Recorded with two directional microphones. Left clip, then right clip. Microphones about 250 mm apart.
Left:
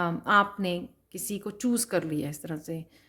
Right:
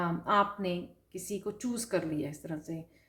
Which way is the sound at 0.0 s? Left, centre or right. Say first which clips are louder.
Left 5 dB; left.